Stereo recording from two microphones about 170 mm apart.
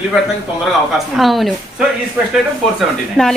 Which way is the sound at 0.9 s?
Centre (ahead or behind).